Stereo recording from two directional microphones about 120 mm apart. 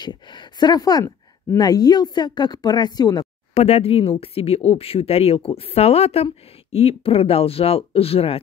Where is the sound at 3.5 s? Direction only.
55° left (ahead or behind).